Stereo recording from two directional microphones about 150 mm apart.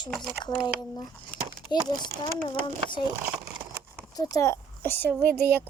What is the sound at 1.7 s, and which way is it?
Speech, 25° left (ahead or behind).